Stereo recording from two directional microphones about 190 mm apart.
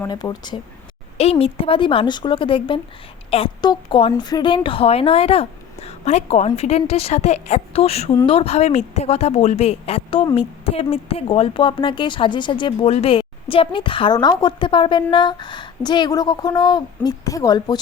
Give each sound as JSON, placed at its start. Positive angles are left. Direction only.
{"t": 0.0, "sound": "a woman's voice", "side_deg": 20}